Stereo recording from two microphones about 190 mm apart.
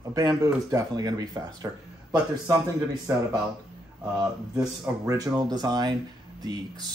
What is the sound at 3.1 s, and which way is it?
Speech, 15° right (ahead or behind).